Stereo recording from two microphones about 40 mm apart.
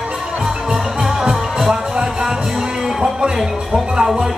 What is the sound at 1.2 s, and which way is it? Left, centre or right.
Music, centre.